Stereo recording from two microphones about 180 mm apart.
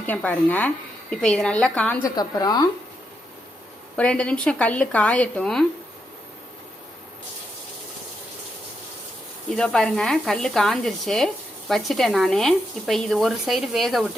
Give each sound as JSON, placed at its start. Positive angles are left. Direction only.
{"t": 0.0, "sound": "speech", "side_deg": 10}
{"t": 2.0, "sound": "a woman's voice", "side_deg": 20}
{"t": 3.9, "sound": "speech", "side_deg": 5}
{"t": 9.6, "sound": "speech", "side_deg": 5}